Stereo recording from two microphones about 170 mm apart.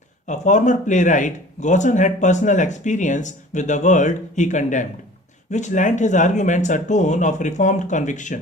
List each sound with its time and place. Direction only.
0.3 s speech: 45° left (ahead or behind)